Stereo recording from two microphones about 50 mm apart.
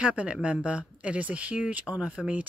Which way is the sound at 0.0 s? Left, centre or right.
Right.